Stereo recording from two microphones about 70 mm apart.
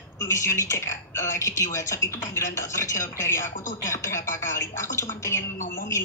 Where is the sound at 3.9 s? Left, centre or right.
Left.